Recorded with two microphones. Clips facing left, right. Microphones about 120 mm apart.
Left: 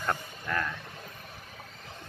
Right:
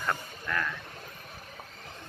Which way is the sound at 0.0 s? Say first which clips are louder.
Left 1 dB; 30° left (ahead or behind).